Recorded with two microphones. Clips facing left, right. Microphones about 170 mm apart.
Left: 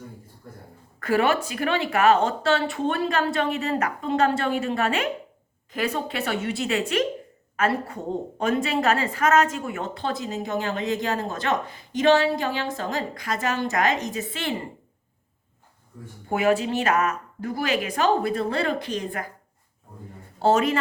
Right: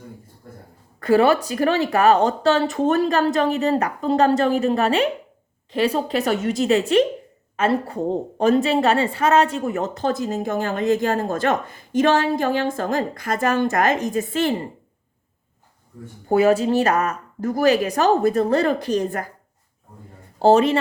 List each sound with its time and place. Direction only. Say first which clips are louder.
0.9 s a woman's voice: right 6 dB; 30° right (ahead or behind)
16.3 s speech: right 6 dB; 35° right (ahead or behind)
20.4 s speech: right 5 dB; 35° right (ahead or behind)